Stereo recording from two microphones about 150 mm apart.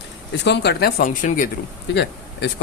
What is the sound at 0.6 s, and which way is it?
Speech, 90° left.